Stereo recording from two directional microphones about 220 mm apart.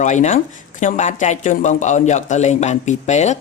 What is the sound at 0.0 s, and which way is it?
Speech, 35° left (ahead or behind).